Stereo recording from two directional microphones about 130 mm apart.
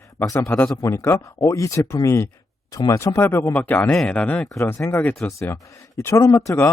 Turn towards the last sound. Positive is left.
turn(degrees=20)  # may be behind; listen again after turning